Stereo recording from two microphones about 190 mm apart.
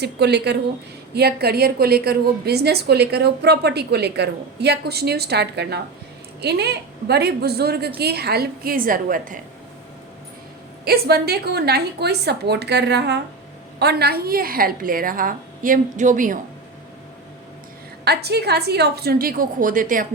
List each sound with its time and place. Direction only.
0.0 s a woman's voice: 60° right (ahead or behind)
10.8 s a woman's voice: 55° right (ahead or behind)
18.0 s a woman's voice: 60° right (ahead or behind)